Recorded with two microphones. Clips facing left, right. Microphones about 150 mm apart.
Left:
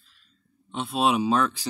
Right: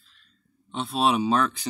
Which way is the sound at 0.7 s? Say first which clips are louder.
Even; 5° left (ahead or behind).